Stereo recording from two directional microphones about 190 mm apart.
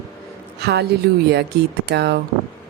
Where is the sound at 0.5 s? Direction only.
60° right (ahead or behind).